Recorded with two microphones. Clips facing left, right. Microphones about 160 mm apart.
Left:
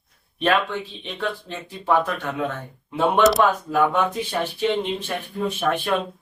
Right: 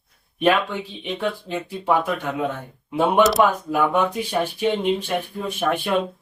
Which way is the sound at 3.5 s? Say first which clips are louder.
Even; 10° right (ahead or behind).